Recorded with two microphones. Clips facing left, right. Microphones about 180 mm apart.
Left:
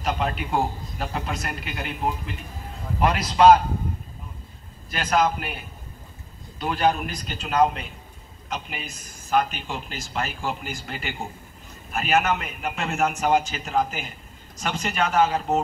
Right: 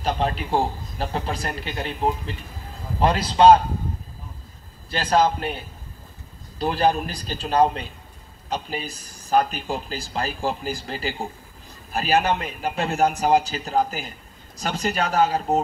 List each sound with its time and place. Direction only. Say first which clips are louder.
0.0 s a man's voice: right 2 dB; 30° right (ahead or behind)
4.8 s a man's voice: right 2 dB; 30° right (ahead or behind)